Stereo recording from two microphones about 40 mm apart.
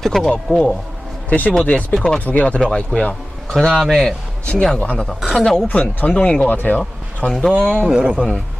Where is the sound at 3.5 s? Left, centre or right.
Centre.